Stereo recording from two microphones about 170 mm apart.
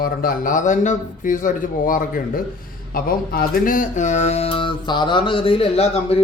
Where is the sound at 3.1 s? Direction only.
55° left (ahead or behind).